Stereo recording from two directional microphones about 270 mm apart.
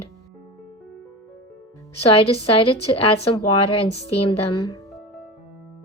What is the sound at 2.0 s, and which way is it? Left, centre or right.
Speech, left.